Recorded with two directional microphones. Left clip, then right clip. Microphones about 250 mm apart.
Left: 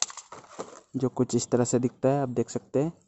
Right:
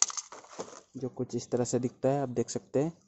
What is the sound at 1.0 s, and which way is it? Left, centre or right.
Speech, left.